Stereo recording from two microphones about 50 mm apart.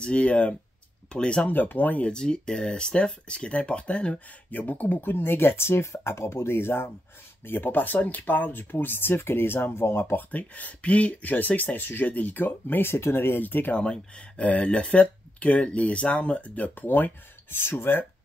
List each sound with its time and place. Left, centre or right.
0.0 s speech: left
1.5 s speech: left
2.0 s speech: centre; by 10.2 s left
10.3 s speech: left
13.4 s speech: left
13.7 s speech: left